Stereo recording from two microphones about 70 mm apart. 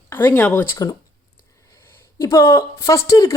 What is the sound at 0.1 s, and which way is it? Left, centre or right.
Speech, left.